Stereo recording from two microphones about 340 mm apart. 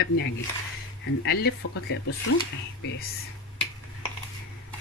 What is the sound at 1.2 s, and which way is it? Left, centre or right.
Speech, left.